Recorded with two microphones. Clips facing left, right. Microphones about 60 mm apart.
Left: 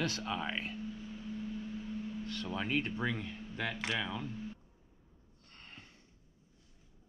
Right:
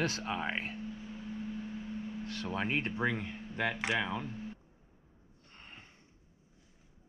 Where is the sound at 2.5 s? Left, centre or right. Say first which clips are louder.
Right 1 dB; right.